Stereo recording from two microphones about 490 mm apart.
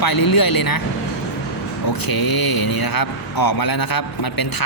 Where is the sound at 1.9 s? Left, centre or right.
Left.